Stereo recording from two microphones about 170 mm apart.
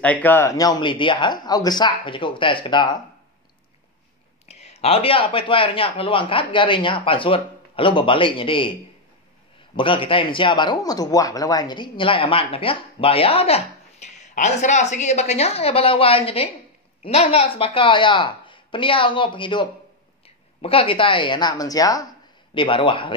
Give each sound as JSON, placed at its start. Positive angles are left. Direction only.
{"t": 0.0, "sound": "speech", "side_deg": 10}
{"t": 4.5, "sound": "speech", "side_deg": 40}
{"t": 9.8, "sound": "speech", "side_deg": 30}